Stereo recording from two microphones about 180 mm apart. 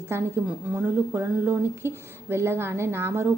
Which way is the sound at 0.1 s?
10° right (ahead or behind).